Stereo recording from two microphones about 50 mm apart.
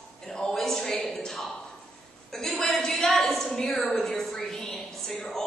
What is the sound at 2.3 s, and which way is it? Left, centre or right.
A woman's voice, centre.